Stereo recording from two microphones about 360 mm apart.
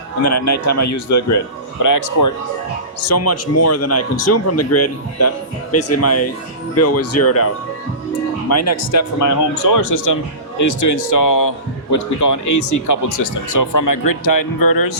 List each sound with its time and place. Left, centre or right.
0.3 s a man's voice: left
3.1 s speech: left
8.4 s a man's voice: left